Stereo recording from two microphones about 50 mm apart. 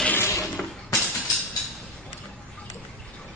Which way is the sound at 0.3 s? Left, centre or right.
Left.